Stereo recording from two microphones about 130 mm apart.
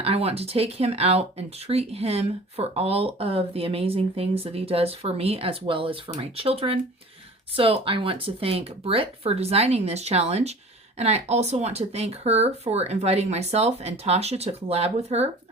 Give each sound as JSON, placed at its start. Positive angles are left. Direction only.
{"t": 0.0, "sound": "speech", "side_deg": -50}